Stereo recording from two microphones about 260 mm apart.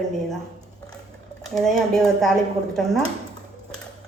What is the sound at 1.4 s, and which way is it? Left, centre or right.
Speech, centre.